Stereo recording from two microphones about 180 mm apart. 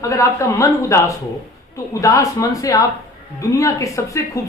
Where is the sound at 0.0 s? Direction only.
15° left (ahead or behind).